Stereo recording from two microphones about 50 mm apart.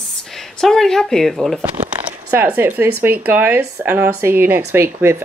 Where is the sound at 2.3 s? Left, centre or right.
Right.